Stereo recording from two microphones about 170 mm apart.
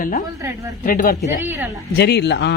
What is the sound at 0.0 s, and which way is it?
Speech, 55° left (ahead or behind).